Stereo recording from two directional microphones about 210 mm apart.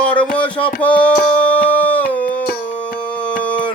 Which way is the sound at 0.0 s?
5° left (ahead or behind).